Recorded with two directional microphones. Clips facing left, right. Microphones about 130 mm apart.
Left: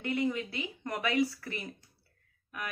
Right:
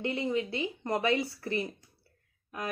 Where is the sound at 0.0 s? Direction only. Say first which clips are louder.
Right 1 dB; 25° right (ahead or behind).